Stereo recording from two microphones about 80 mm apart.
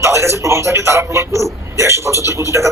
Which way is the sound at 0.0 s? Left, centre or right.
Right.